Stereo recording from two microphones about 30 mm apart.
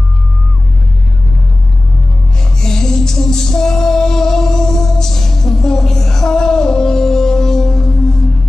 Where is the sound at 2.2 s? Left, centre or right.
Left.